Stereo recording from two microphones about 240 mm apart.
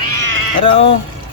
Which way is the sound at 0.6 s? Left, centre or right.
Left.